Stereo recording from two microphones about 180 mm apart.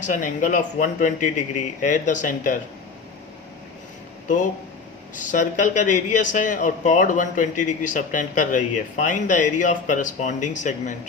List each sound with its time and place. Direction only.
0.0 s speech: 45° left (ahead or behind)
5.1 s speech: 45° left (ahead or behind)